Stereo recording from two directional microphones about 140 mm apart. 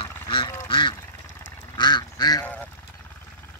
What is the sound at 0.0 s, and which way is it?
Duck, 35° left (ahead or behind).